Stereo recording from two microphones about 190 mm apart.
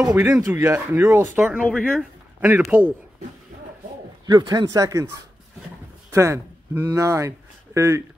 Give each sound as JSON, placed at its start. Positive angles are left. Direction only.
{"t": 0.0, "sound": "speech", "side_deg": -10}
{"t": 2.7, "sound": "speech", "side_deg": -10}
{"t": 4.3, "sound": "speech", "side_deg": -20}
{"t": 6.1, "sound": "speech", "side_deg": -15}